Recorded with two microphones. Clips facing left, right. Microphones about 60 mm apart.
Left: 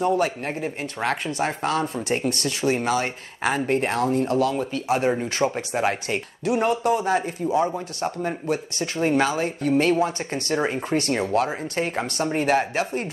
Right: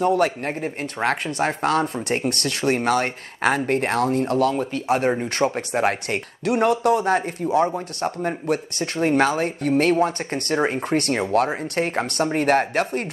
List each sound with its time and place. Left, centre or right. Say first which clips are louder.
0.0 s speech: right 2 dB; right
8.5 s speech: right 2 dB; right